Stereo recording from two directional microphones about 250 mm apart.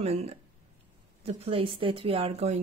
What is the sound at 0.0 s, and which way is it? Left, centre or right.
Speech, right.